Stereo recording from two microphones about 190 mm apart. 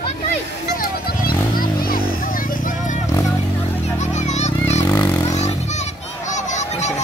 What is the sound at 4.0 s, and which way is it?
Children playing, 35° left (ahead or behind).